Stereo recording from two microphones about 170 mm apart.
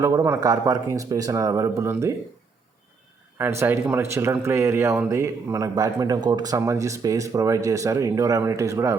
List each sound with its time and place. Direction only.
0.3 s speech: 20° right (ahead or behind)
3.3 s speech: 15° right (ahead or behind)